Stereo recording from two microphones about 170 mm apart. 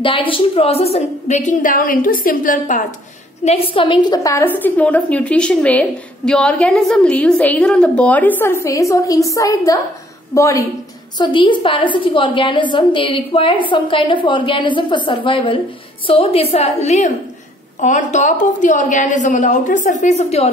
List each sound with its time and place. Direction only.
0.0 s a woman's voice: 30° left (ahead or behind); by 2.8 s 50° left (ahead or behind)
3.4 s a woman's voice: 35° left (ahead or behind); by 10.6 s 20° left (ahead or behind)
11.1 s a woman's voice: 30° left (ahead or behind)